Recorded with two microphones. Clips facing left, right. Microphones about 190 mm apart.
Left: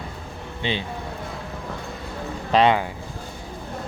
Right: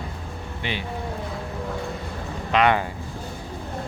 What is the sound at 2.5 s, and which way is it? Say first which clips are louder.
Speech: left 2 dB; 35° left (ahead or behind).